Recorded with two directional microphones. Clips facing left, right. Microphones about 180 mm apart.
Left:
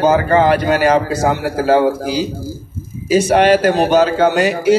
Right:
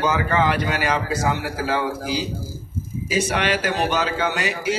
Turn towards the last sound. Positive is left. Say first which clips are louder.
# left 11 dB
turn(degrees=45)  # may be behind; listen again after turning